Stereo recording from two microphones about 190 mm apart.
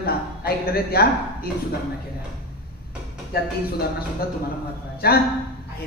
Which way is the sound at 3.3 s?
55° left (ahead or behind).